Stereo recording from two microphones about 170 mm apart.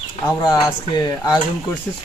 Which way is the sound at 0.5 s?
20° left (ahead or behind).